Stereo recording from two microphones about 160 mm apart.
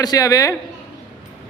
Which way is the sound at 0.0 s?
25° left (ahead or behind).